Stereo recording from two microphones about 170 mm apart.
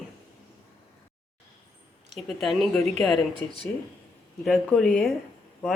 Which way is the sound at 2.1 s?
Centre (ahead or behind).